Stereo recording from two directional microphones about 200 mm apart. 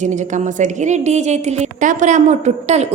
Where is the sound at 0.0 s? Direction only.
35° right (ahead or behind).